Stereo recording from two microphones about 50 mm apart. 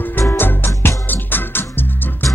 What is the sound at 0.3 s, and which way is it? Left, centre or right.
Music, left.